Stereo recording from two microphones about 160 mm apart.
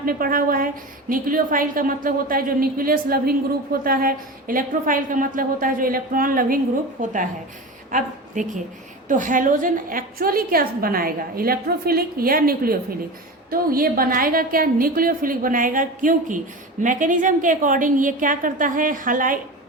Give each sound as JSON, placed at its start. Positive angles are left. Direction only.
{"t": 0.0, "sound": "a woman's voice", "side_deg": -65}